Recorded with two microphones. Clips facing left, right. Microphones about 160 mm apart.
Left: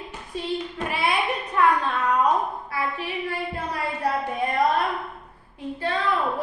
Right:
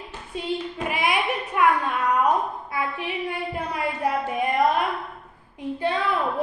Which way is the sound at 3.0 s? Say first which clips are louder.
Even; 20° right (ahead or behind).